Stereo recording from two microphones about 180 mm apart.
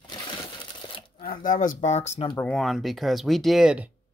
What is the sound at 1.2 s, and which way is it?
Speech, 50° left (ahead or behind).